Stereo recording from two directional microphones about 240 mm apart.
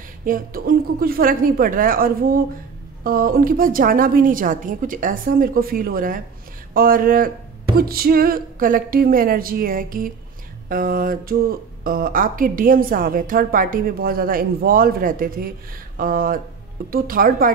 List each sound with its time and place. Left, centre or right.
0.2 s a woman's voice: right